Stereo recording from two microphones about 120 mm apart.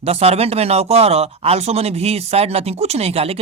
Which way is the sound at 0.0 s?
60° right (ahead or behind).